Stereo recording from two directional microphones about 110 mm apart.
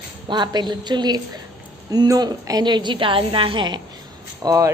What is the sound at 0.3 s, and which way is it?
A woman's voice, 40° right (ahead or behind).